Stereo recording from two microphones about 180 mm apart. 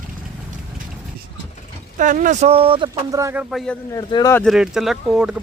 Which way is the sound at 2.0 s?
45° right (ahead or behind).